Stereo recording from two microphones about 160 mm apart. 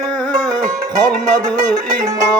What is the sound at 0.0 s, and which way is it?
Music, 5° left (ahead or behind).